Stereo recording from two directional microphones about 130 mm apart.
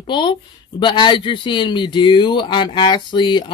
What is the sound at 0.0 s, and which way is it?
Speech, 35° left (ahead or behind).